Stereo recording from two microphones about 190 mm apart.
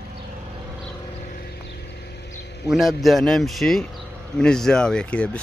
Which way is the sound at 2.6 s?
Centre (ahead or behind).